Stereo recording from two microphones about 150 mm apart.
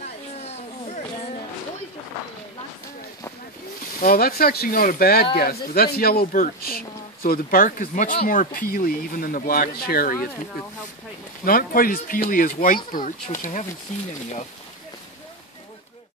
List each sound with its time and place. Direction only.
4.0 s speech: 80° left
11.4 s speech: 75° left (ahead or behind); by 13.7 s 55° left (ahead or behind)